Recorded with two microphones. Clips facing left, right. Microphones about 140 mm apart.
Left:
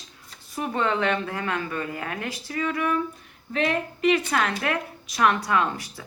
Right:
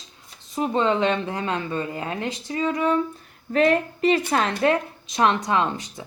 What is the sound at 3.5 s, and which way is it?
Speech, 45° right (ahead or behind).